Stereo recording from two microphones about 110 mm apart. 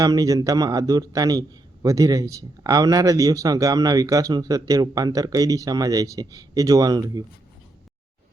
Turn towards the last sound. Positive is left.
turn(degrees=-40)  # may be behind; listen again after turning